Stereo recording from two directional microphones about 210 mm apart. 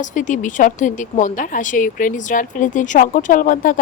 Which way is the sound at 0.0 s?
35° left (ahead or behind).